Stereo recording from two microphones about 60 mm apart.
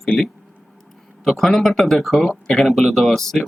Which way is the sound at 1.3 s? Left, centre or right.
Centre.